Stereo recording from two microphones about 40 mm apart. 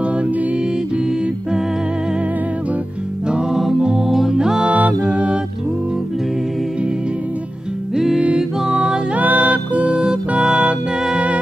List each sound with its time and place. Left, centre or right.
3.3 s music: right
4.1 s music: centre
4.4 s music: centre
4.6 s music: right
5.0 s a capella: right
7.9 s music: centre
9.1 s music: right
11.0 s music: centre